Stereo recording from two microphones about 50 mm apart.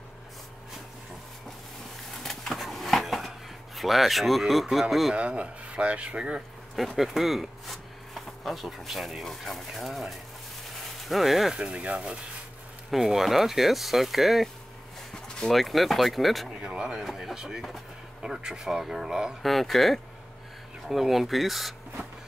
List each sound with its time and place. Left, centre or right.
2.2 s a sound: centre
4.7 s speech: centre
5.1 s speech: right
7.0 s speech: centre
11.5 s speech: centre
12.9 s speech: centre
15.1 s a sound: centre
15.5 s speech: centre
16.7 s speech: centre
18.2 s speech: centre
19.4 s speech: centre